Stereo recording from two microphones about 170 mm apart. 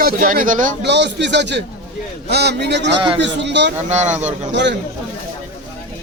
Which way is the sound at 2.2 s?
75° right (ahead or behind).